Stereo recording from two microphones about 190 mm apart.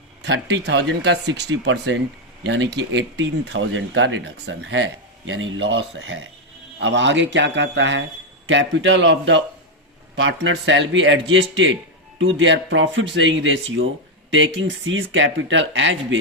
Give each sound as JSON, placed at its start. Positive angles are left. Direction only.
{"t": 0.2, "sound": "speech", "side_deg": -65}
{"t": 6.7, "sound": "speech", "side_deg": -75}
{"t": 10.2, "sound": "speech", "side_deg": -80}